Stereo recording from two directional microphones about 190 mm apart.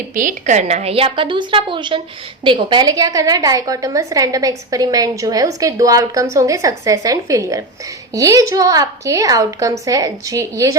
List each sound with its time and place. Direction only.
0.1 s a woman's voice: 45° right (ahead or behind); by 10.8 s 15° right (ahead or behind)